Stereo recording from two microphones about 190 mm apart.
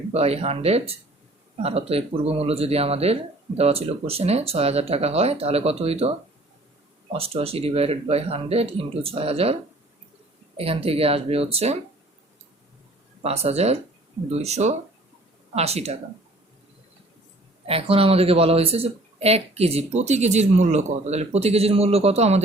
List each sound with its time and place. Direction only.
0.1 s speech: 35° right (ahead or behind)
10.6 s speech: 30° right (ahead or behind)
13.2 s speech: 35° right (ahead or behind)
17.7 s speech: 30° right (ahead or behind)